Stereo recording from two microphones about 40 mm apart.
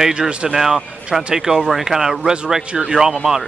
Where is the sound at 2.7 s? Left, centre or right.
Right.